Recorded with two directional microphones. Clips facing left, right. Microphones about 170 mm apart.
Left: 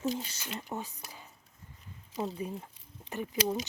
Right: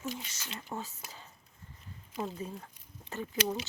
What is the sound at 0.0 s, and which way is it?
Speech, 35° left (ahead or behind).